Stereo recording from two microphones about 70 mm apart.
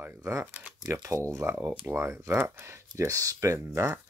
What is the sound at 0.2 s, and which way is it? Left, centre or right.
Speech, right.